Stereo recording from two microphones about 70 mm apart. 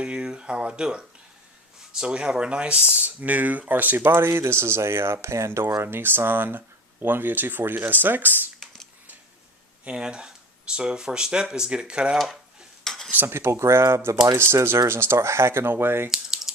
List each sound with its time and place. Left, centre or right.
0.0 s speech: centre
8.6 s a sound: centre
9.8 s speech: centre
12.1 s speech: centre
12.8 s cutlery: centre
13.2 s speech: right
16.0 s typing: centre